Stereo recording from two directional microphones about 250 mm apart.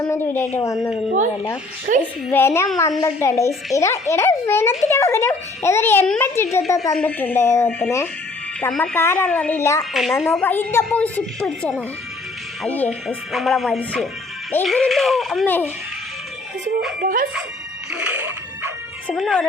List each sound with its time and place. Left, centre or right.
0.1 s a woman's voice: centre
2.0 s a child's voice: centre
9.9 s a woman's voice: centre
17.0 s speech: right
17.9 s dog: centre
19.0 s a woman's voice: centre